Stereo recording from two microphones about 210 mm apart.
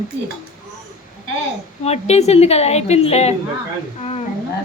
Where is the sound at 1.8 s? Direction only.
30° left (ahead or behind).